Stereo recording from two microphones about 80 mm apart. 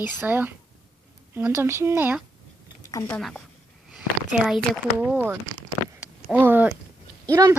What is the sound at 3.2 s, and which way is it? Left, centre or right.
Speech, centre.